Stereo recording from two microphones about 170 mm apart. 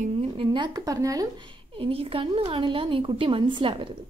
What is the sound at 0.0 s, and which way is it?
Speech, 35° right (ahead or behind).